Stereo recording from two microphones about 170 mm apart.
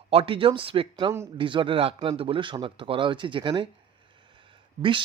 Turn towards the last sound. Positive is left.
turn(degrees=-30)  # may be behind; listen again after turning